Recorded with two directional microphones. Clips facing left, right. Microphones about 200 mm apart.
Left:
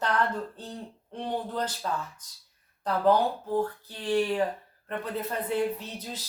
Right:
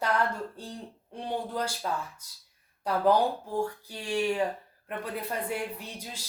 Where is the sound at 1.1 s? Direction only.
10° right (ahead or behind).